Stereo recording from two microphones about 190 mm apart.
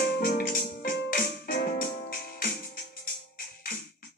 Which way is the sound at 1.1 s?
45° left (ahead or behind).